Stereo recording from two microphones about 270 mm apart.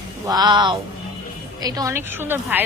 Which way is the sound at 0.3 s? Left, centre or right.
Centre.